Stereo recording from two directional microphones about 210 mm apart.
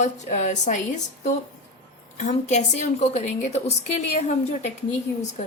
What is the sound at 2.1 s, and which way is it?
A woman's voice, 35° left (ahead or behind).